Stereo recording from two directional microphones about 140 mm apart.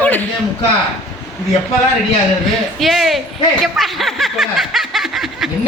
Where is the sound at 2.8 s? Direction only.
Centre (ahead or behind).